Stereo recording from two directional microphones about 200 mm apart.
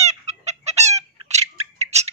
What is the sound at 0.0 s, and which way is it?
Chicken, 35° right (ahead or behind).